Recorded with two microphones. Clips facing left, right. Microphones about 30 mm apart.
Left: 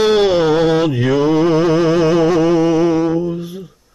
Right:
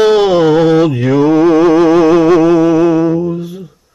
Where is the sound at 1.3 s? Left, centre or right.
Right.